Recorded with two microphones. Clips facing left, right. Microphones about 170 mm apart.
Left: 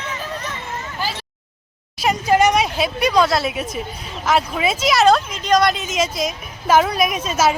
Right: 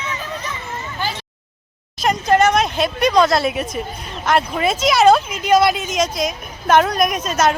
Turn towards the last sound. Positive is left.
turn(degrees=5)  # may be behind; listen again after turning